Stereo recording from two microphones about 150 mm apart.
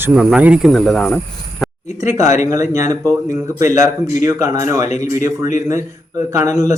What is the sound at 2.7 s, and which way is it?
Speech, 20° right (ahead or behind).